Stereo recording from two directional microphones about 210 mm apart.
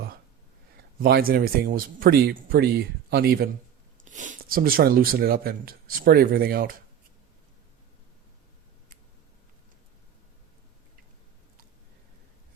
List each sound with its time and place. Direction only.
1.0 s speech: 45° right (ahead or behind)
4.0 s speech: 35° right (ahead or behind)